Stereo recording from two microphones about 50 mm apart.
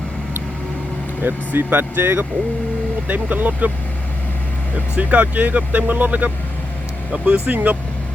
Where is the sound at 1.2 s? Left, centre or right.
Right.